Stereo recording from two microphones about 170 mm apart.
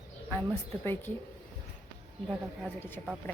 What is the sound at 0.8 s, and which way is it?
Speech, 15° left (ahead or behind).